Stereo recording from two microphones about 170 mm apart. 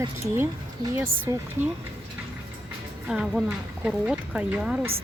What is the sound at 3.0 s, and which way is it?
Speech, 5° right (ahead or behind).